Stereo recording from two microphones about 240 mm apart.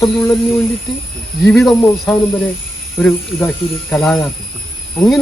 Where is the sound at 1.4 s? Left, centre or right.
Centre.